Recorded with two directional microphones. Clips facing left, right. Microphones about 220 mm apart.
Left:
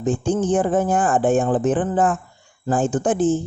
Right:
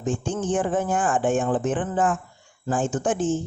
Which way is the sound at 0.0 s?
35° left (ahead or behind).